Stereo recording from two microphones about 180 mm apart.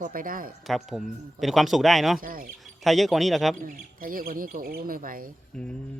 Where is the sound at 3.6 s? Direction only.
50° right (ahead or behind).